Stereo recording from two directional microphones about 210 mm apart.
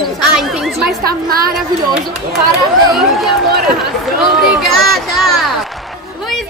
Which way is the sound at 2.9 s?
Centre (ahead or behind).